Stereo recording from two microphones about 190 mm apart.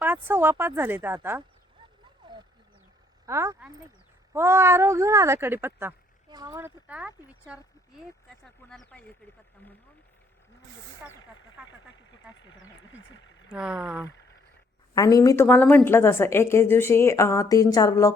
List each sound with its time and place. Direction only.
0.0 s speech: 10° right (ahead or behind)
3.2 s speech: 15° right (ahead or behind)
8.7 s a woman's voice: 5° left (ahead or behind)
11.6 s speech: 5° right (ahead or behind)
12.1 s speech: 20° left (ahead or behind)
13.5 s speech: 5° right (ahead or behind)
14.9 s a woman's voice: 20° left (ahead or behind)
15.4 s a woman's voice: 5° left (ahead or behind)